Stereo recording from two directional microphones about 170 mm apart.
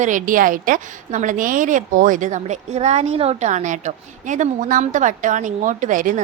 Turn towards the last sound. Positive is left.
turn(degrees=-50)  # may be behind; listen again after turning